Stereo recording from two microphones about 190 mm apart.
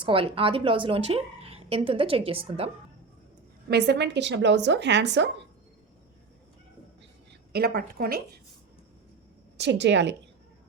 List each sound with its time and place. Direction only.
0.0 s a woman's voice: 30° right (ahead or behind)
3.7 s speech: 65° right (ahead or behind)
7.5 s a woman's voice: 55° right (ahead or behind)
9.6 s speech: 65° right (ahead or behind)